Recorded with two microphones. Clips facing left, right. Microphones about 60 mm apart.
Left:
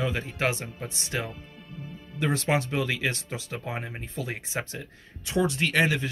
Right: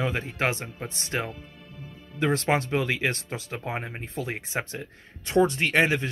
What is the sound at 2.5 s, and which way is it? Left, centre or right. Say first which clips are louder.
Speech: right 1 dB; right.